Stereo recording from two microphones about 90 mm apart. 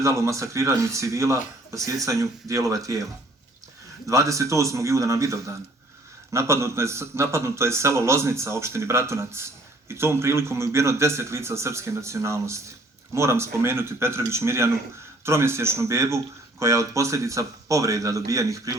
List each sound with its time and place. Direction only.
0.0 s a man's voice: 35° right (ahead or behind)